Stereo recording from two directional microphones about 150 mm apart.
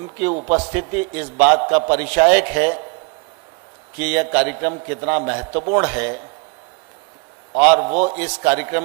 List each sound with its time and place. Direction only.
0.0 s a man's voice: 10° right (ahead or behind)
3.9 s a man's voice: 10° right (ahead or behind)
7.6 s a man's voice: 15° right (ahead or behind)